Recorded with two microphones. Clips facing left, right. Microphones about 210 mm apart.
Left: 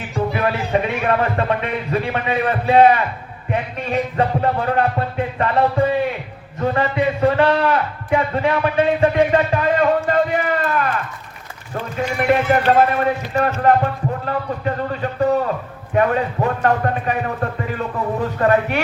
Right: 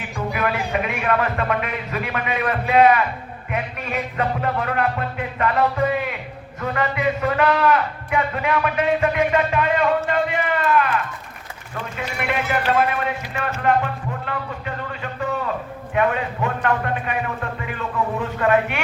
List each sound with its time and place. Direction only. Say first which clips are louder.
0.3 s speech: left 2 dB; 30° left (ahead or behind)
3.5 s music: left 5 dB; 30° left (ahead or behind)
6.6 s a sound: left 5 dB; 30° left (ahead or behind)
11.7 s clip-clop: left 6 dB; 35° left (ahead or behind)
16.0 s a man's voice: left 4 dB; 40° left (ahead or behind)